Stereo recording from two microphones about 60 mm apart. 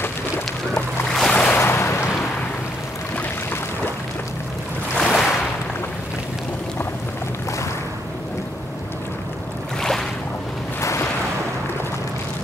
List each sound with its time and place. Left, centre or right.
0.7 s a sound: centre
1.3 s boat: centre
1.6 s boat: left
4.9 s boat: centre
9.8 s boat: centre
10.8 s a sound: left